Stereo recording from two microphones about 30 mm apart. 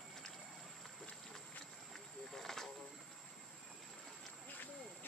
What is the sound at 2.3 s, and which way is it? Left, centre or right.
Vehicle, centre.